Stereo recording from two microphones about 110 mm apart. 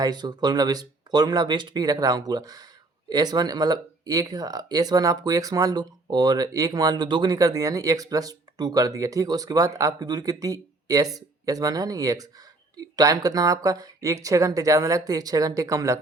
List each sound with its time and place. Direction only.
0.0 s speech: 40° right (ahead or behind)